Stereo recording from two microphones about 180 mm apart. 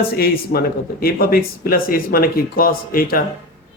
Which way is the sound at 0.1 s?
60° left (ahead or behind).